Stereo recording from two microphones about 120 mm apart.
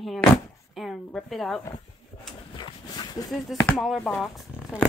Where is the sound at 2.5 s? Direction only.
35° left (ahead or behind).